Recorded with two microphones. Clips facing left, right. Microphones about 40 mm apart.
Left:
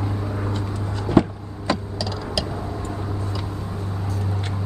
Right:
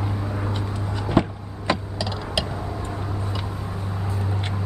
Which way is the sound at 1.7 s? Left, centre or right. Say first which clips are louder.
Even; right.